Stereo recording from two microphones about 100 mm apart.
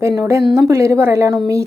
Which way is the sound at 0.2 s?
30° right (ahead or behind).